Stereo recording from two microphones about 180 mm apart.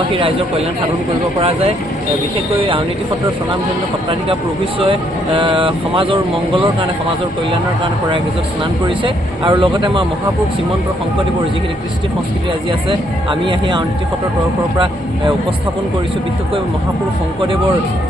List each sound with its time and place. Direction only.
1.4 s speech: 35° right (ahead or behind)
4.8 s speech: 30° right (ahead or behind)
8.9 s speech: 30° right (ahead or behind)
13.5 s speech: 25° right (ahead or behind)
17.4 s speech: 30° right (ahead or behind)